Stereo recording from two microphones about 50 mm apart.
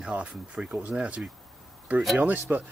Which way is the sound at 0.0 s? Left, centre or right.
Right.